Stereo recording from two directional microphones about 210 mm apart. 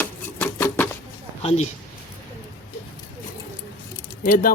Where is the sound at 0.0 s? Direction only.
10° left (ahead or behind).